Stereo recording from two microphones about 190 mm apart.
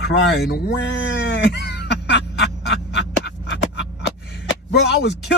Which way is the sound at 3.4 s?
70° left (ahead or behind).